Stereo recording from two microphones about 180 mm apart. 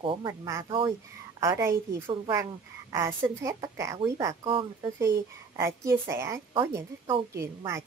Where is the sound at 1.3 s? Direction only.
15° right (ahead or behind).